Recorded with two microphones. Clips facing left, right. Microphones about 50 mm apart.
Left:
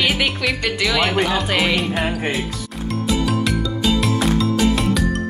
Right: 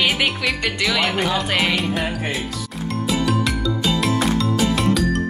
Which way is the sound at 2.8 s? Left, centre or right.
Centre.